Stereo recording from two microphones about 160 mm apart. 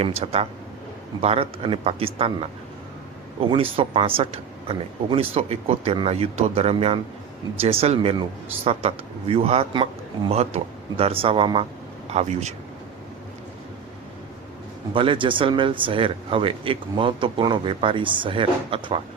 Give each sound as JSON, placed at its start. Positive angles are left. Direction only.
{"t": 0.0, "sound": "speech", "side_deg": -40}
{"t": 3.5, "sound": "speech", "side_deg": -35}
{"t": 12.1, "sound": "speech", "side_deg": -45}
{"t": 14.9, "sound": "speech", "side_deg": -30}